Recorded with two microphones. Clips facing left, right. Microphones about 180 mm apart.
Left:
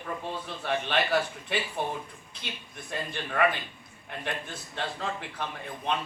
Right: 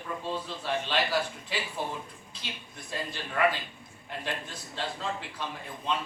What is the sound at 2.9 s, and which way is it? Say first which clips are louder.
A man's voice: left 2 dB; 60° left (ahead or behind).